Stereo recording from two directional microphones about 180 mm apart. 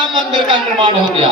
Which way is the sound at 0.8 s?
30° right (ahead or behind).